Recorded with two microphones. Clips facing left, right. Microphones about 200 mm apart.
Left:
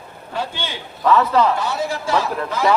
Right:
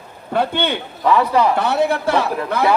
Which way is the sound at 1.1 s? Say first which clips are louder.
Even; 10° right (ahead or behind).